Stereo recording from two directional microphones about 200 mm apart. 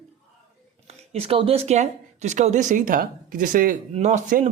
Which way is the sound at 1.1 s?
30° right (ahead or behind).